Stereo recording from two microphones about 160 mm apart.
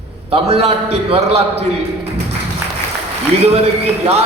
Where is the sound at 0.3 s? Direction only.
35° right (ahead or behind).